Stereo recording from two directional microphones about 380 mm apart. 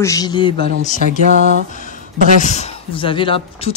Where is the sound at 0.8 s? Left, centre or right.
Centre.